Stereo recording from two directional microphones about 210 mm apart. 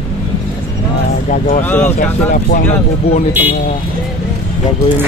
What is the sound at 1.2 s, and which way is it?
Speech, 40° left (ahead or behind).